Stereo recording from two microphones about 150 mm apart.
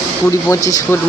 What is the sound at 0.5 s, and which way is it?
Speech, 20° left (ahead or behind).